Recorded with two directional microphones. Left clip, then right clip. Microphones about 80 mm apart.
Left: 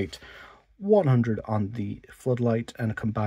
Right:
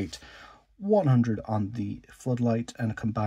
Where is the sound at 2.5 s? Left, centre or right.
Left.